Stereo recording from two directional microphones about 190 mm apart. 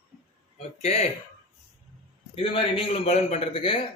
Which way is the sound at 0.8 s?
35° left (ahead or behind).